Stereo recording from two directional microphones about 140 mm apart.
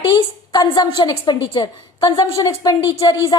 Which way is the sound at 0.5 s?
30° left (ahead or behind).